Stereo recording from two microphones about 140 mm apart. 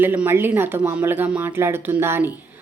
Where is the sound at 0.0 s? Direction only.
15° right (ahead or behind).